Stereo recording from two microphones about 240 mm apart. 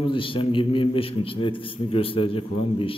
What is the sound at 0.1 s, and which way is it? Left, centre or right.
A man's voice, left.